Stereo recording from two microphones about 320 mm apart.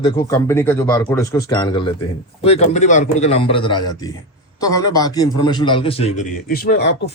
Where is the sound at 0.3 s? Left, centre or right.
Centre.